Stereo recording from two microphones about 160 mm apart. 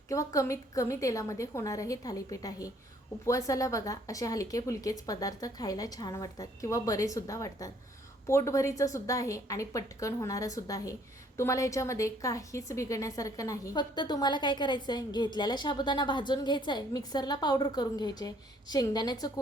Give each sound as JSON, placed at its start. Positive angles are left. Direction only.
{"t": 0.1, "sound": "a woman's voice", "side_deg": 20}